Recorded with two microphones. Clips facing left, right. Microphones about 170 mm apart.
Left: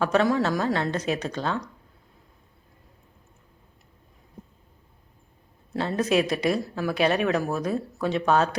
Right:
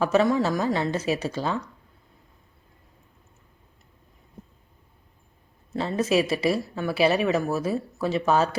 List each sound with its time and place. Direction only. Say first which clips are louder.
0.0 s speech: right 1 dB; 5° right (ahead or behind)
5.7 s speech: even; centre (ahead or behind)